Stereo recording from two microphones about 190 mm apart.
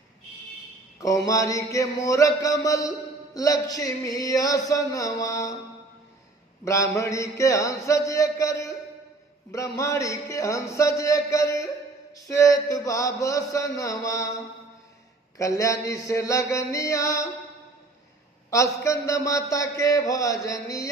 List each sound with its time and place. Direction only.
0.9 s a man's voice: 15° left (ahead or behind)
6.7 s a man's voice: 15° left (ahead or behind)
15.4 s a man's voice: 15° left (ahead or behind)
18.5 s a man's voice: 15° left (ahead or behind)